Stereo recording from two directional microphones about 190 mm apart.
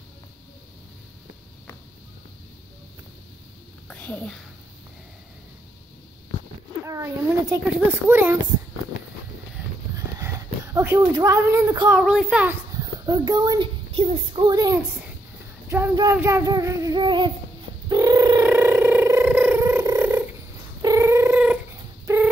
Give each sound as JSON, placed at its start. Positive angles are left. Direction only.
{"t": 3.9, "sound": "a child's voice", "side_deg": 5}
{"t": 7.5, "sound": "a child's voice", "side_deg": -10}
{"t": 9.9, "sound": "a sound", "side_deg": -15}
{"t": 12.0, "sound": "a child's voice", "side_deg": -5}
{"t": 12.7, "sound": "a child's voice", "side_deg": -20}
{"t": 15.7, "sound": "child singing", "side_deg": -20}
{"t": 17.8, "sound": "a sound", "side_deg": -20}
{"t": 20.8, "sound": "cat", "side_deg": -15}
{"t": 22.0, "sound": "chicken", "side_deg": -10}